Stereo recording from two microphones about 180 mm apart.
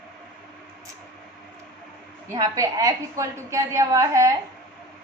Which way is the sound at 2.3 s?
20° right (ahead or behind).